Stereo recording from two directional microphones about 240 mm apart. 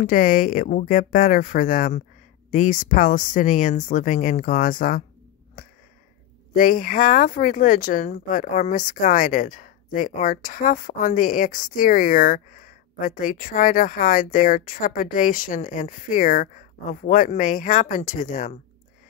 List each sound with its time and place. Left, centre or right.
0.0 s speech: left
5.6 s sniff: left
6.5 s speech: left